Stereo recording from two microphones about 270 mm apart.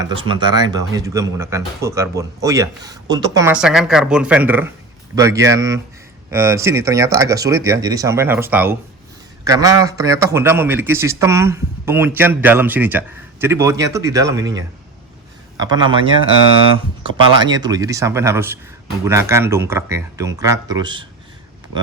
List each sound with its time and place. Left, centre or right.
0.0 s a man's voice: centre